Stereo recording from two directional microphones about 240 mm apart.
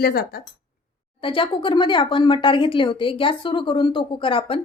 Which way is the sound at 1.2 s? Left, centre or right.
Left.